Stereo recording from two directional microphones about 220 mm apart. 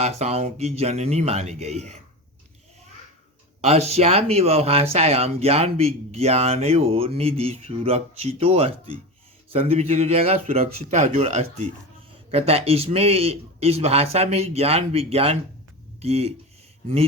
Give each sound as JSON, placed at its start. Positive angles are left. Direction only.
{"t": 0.0, "sound": "speech", "side_deg": -30}
{"t": 3.6, "sound": "speech", "side_deg": -30}